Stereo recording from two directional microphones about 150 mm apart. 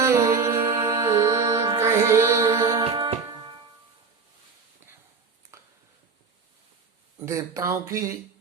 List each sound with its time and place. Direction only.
0.0 s music: 20° right (ahead or behind)
2.8 s music: 40° right (ahead or behind)
5.5 s a sound: 20° right (ahead or behind)
7.2 s speech: 20° right (ahead or behind)